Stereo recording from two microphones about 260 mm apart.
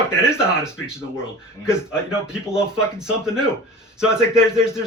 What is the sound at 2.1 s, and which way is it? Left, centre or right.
Speech, centre.